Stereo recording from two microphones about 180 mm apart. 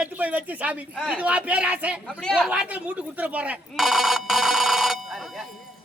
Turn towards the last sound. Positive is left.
turn(degrees=0)  # may be behind; listen again after turning